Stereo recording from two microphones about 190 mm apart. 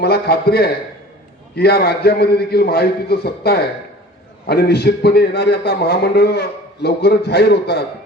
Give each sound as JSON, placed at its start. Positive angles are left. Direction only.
{"t": 0.0, "sound": "a man's voice", "side_deg": 55}